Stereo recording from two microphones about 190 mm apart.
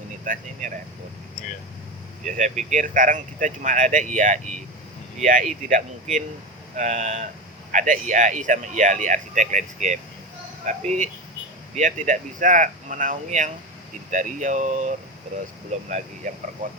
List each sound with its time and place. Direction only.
0.3 s speech: 45° right (ahead or behind)
2.2 s speech: 40° right (ahead or behind)